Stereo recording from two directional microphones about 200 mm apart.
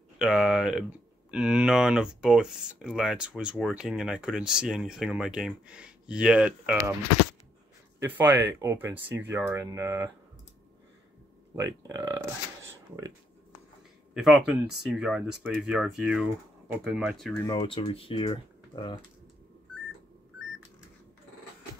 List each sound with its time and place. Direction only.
0.2 s speech: centre (ahead or behind)
8.0 s speech: 10° right (ahead or behind)
11.5 s speech: 15° right (ahead or behind)
14.1 s speech: centre (ahead or behind)
17.5 s speech: 25° left (ahead or behind)